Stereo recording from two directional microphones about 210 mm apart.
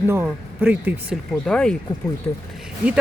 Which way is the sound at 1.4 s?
5° left (ahead or behind).